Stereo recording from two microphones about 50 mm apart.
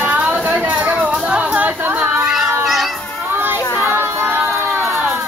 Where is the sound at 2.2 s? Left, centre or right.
Centre.